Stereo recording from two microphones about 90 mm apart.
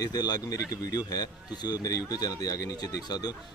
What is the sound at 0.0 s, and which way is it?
Speech, 45° left (ahead or behind).